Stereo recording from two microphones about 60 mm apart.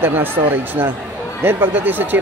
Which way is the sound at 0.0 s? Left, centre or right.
Right.